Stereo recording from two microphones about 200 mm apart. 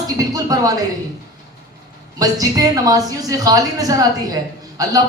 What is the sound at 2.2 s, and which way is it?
A man's voice, 15° right (ahead or behind).